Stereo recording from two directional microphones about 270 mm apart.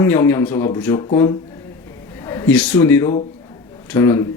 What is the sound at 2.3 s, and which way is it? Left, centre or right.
A man's voice, centre.